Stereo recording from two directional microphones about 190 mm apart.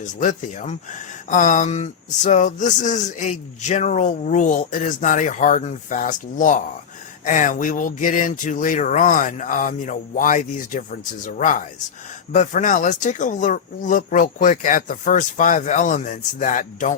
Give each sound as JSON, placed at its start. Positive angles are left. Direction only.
{"t": 0.0, "sound": "speech", "side_deg": 40}